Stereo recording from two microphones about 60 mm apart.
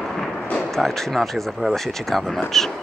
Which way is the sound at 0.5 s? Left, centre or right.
Centre.